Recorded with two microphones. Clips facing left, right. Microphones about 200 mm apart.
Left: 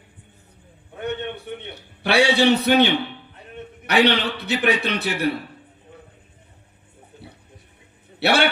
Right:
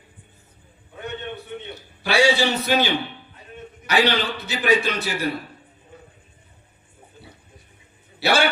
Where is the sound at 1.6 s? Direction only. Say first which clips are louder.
Right 2 dB; 60° left (ahead or behind).